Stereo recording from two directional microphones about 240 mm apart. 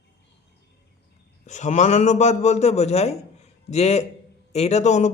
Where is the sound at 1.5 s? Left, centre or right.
Left.